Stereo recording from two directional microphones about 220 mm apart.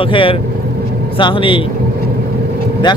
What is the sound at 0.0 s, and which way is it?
Speech, 25° left (ahead or behind).